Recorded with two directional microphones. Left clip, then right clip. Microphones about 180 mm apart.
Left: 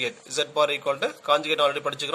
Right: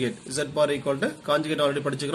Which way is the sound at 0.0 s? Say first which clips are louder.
Left 1 dB; 55° left (ahead or behind).